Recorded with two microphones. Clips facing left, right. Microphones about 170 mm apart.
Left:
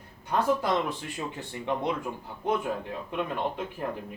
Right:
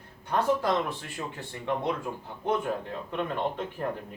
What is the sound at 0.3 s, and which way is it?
Speech, 15° left (ahead or behind).